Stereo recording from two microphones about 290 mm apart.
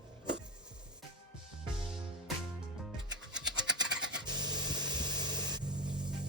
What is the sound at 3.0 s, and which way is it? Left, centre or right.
Music, right.